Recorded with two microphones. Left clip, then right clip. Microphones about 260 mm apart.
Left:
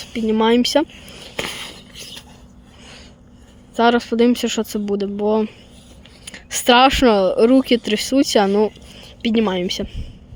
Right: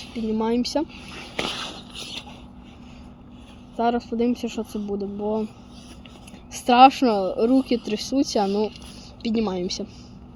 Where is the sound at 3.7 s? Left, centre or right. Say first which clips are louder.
Left 8 dB; left.